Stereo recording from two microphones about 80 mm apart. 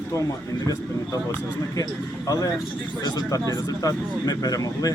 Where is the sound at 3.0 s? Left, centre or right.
Left.